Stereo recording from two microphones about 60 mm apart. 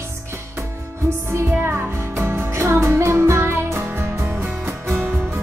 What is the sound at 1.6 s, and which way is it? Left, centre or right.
Music, right.